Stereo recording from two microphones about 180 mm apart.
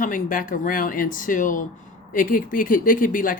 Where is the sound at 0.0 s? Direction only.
50° left (ahead or behind).